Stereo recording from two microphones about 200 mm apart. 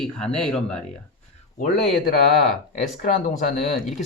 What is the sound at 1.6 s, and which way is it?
Speech, 45° left (ahead or behind).